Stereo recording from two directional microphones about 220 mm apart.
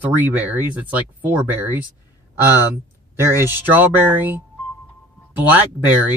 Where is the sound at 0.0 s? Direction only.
10° right (ahead or behind).